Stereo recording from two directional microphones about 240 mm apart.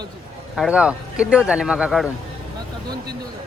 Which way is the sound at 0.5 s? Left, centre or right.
Centre.